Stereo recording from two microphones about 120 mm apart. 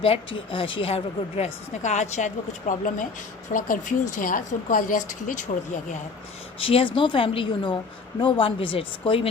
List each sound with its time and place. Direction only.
0.0 s a woman's voice: 50° left (ahead or behind)
1.8 s speech: 75° left (ahead or behind); by 5.5 s 90° left
6.6 s a woman's voice: 50° left (ahead or behind)